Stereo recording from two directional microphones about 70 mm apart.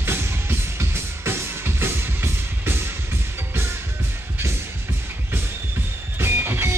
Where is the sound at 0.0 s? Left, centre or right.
Right.